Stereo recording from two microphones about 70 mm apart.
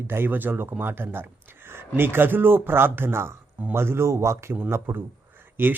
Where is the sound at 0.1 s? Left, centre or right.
Right.